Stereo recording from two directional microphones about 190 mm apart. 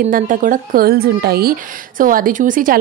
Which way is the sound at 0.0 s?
45° right (ahead or behind).